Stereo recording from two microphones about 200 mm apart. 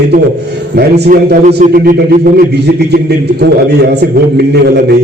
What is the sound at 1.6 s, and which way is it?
Speech, 45° right (ahead or behind).